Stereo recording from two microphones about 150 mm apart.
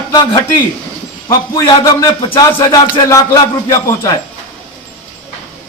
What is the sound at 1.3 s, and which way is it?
Music, 25° left (ahead or behind).